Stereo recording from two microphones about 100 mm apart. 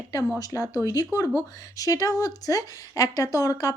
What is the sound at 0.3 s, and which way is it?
Speech, 35° left (ahead or behind).